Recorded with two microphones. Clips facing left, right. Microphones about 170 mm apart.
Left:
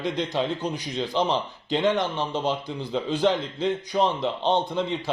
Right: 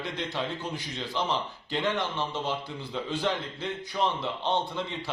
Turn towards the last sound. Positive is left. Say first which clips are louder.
# left 5 dB
turn(degrees=20)  # may be behind; listen again after turning